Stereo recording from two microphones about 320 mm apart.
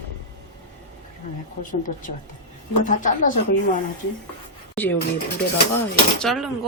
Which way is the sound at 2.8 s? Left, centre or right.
Left.